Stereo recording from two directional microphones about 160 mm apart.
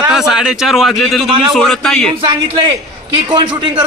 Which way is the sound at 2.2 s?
30° right (ahead or behind).